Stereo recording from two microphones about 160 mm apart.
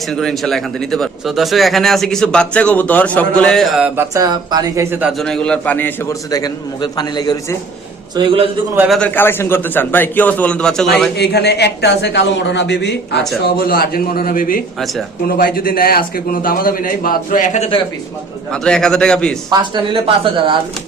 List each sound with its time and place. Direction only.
0.1 s speech: 5° left (ahead or behind)
4.1 s speech: 25° right (ahead or behind)
4.9 s a man's voice: 10° right (ahead or behind)
5.2 s a man's voice: 5° left (ahead or behind)
6.3 s a man's voice: 25° left (ahead or behind)
8.1 s speech: 30° right (ahead or behind)
8.9 s a man's voice: 10° left (ahead or behind)
11.2 s speech: 90° left
13.4 s a man's voice: 75° left (ahead or behind); by 17.7 s 50° left (ahead or behind)
18.5 s speech: 5° left (ahead or behind)
19.5 s speech: 25° right (ahead or behind)